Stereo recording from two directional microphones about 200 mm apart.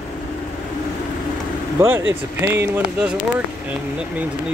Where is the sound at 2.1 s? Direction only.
10° right (ahead or behind).